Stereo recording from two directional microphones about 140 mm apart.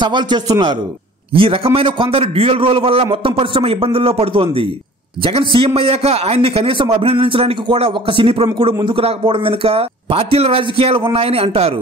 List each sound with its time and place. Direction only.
0.0 s a man's voice: 30° right (ahead or behind)